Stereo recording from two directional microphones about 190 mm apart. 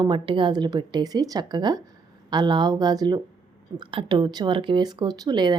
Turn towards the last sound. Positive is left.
turn(degrees=-20)  # may be behind; listen again after turning